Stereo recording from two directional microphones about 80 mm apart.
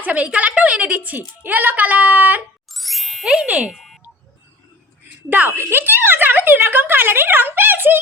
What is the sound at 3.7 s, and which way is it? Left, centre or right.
Car alarm, centre.